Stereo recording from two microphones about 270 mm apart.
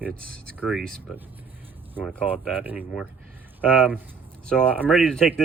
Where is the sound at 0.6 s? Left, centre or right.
Centre.